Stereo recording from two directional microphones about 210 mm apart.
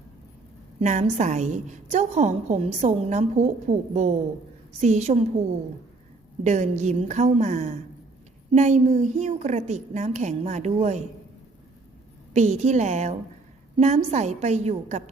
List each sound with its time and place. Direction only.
0.8 s a woman's voice: 35° right (ahead or behind)
6.4 s a woman's voice: 35° right (ahead or behind)
12.3 s a woman's voice: 35° right (ahead or behind)